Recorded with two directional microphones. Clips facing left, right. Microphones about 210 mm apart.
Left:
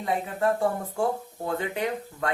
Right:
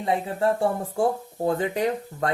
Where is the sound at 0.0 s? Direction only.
30° right (ahead or behind).